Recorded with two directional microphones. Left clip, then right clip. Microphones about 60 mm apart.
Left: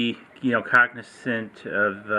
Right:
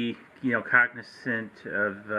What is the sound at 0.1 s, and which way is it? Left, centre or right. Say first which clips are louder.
Speech: left 4 dB; left.